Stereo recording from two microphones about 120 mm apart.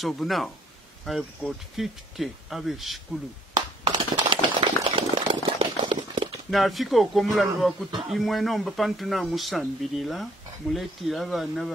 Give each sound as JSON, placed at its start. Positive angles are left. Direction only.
{"t": 0.0, "sound": "speech", "side_deg": 0}
{"t": 3.5, "sound": "a sound", "side_deg": -35}
{"t": 6.5, "sound": "speech", "side_deg": 0}